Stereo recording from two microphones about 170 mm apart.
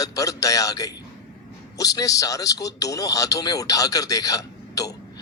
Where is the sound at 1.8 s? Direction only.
20° left (ahead or behind).